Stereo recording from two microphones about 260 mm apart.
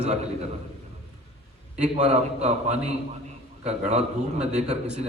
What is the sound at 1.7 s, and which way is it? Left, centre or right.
A man's voice, right.